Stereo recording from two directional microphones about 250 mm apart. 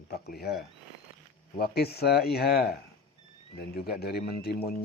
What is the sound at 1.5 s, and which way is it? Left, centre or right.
Speech, left.